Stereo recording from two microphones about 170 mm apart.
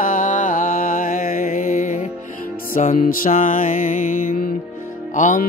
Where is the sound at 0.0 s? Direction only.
50° left (ahead or behind).